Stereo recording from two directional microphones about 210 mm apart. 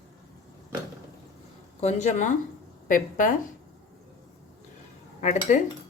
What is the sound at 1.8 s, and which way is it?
Speech, 35° left (ahead or behind).